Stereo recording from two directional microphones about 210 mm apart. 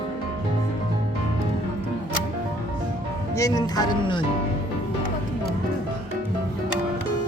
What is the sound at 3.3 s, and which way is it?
Speech, 15° left (ahead or behind).